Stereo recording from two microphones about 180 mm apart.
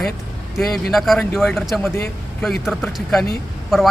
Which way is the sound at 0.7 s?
Centre (ahead or behind).